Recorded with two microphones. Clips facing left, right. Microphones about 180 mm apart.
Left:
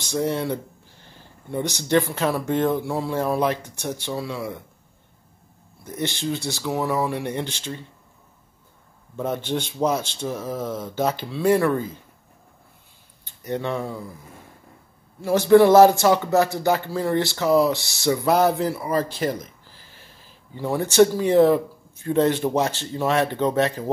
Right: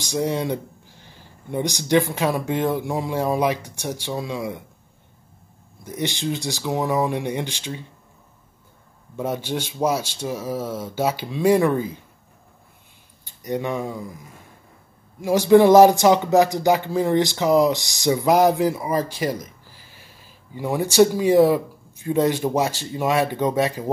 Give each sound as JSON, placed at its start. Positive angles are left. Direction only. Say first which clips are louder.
{"t": 0.0, "sound": "speech", "louder": "right 1 dB", "side_deg": -15}
{"t": 5.9, "sound": "speech", "louder": "right 1 dB", "side_deg": -15}
{"t": 9.1, "sound": "speech", "louder": "even", "side_deg": -10}
{"t": 13.2, "sound": "speech", "louder": "right 1 dB", "side_deg": -15}